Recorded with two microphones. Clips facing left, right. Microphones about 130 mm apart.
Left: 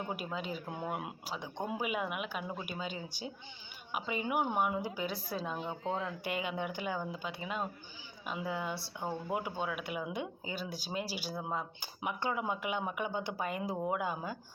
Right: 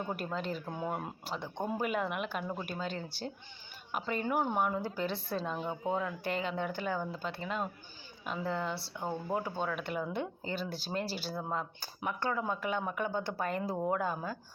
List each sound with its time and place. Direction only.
0.0 s speech: 10° left (ahead or behind)
6.0 s speech: 25° left (ahead or behind)
6.3 s speech: 10° left (ahead or behind)